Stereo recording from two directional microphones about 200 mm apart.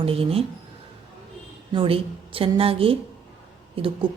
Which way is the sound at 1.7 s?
25° right (ahead or behind).